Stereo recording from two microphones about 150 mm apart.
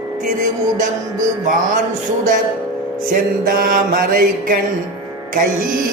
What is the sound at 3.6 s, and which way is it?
Speech, 70° right (ahead or behind).